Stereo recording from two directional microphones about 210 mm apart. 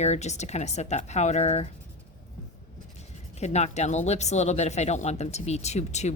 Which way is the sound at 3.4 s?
30° left (ahead or behind).